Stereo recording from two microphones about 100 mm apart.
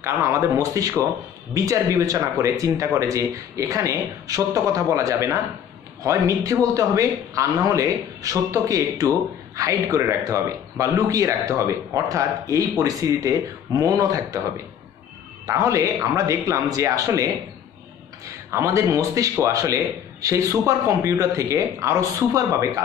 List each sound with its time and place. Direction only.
0.0 s speech: 30° right (ahead or behind)
15.4 s speech: 30° right (ahead or behind)